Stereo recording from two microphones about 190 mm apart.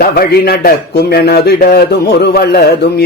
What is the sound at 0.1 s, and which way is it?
A man's voice, 55° left (ahead or behind).